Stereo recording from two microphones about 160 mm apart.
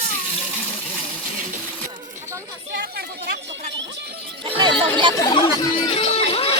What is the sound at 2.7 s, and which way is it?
Chatter, 85° right.